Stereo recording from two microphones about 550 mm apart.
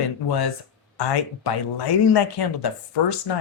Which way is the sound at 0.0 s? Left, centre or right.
Left.